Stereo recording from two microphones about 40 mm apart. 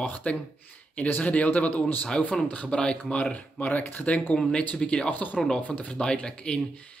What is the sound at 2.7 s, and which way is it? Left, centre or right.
Speech, left.